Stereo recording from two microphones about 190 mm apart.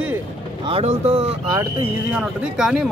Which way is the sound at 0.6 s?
30° right (ahead or behind).